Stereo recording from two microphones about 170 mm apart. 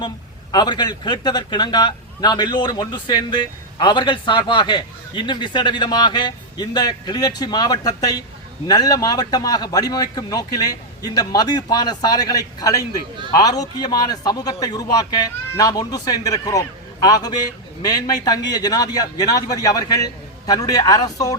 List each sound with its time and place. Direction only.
0.5 s a man's voice: 25° left (ahead or behind)